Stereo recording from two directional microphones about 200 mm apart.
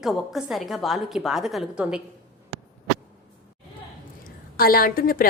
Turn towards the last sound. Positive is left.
turn(degrees=45)  # may be behind; listen again after turning